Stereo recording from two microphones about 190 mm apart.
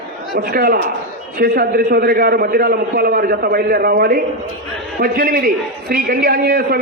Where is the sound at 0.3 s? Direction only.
50° right (ahead or behind).